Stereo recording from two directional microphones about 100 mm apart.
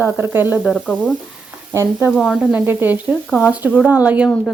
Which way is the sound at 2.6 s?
20° right (ahead or behind).